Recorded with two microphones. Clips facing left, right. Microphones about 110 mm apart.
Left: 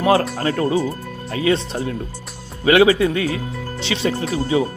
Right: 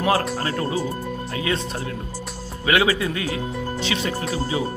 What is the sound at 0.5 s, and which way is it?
A man's voice, 30° left (ahead or behind).